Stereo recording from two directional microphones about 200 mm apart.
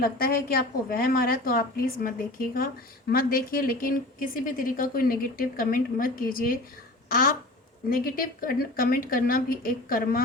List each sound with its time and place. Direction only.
0.0 s a woman's voice: 45° left (ahead or behind)